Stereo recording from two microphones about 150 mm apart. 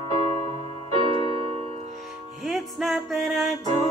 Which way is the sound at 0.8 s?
40° right (ahead or behind).